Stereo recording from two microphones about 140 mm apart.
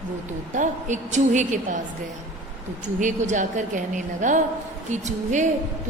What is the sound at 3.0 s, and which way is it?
A woman's voice, 60° right (ahead or behind).